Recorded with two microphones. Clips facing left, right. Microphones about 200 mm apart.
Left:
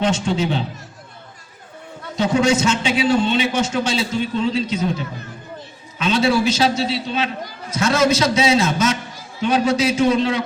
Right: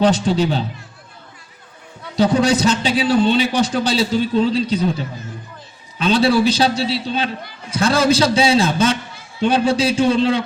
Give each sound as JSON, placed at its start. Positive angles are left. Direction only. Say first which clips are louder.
{"t": 0.0, "sound": "a man's voice", "louder": "right 4 dB", "side_deg": -35}
{"t": 2.1, "sound": "a man's voice", "louder": "right 2 dB", "side_deg": -35}